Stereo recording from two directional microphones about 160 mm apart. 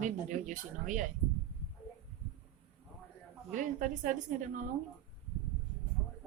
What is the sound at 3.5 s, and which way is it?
A woman's voice, 55° right (ahead or behind).